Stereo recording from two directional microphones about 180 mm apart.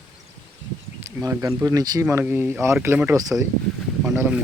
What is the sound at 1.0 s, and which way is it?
Speech, 15° right (ahead or behind).